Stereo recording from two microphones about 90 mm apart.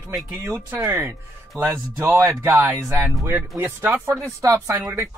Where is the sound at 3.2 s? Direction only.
25° right (ahead or behind).